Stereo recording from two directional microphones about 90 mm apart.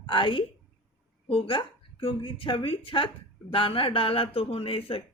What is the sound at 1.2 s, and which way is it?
A woman's voice, 85° left.